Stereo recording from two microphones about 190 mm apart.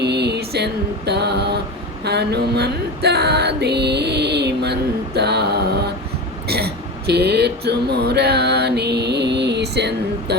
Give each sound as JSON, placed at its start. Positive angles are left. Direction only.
{"t": 0.0, "sound": "mantra", "side_deg": -60}
{"t": 2.0, "sound": "music", "side_deg": -60}
{"t": 6.5, "sound": "a sound", "side_deg": -55}